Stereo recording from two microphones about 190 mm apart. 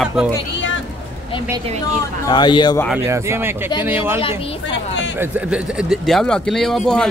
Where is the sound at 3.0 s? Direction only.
15° right (ahead or behind).